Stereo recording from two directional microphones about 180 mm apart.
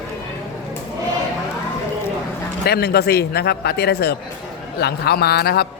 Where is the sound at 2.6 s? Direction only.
65° left (ahead or behind).